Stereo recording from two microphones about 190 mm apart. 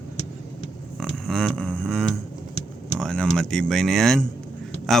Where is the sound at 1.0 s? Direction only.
Centre (ahead or behind).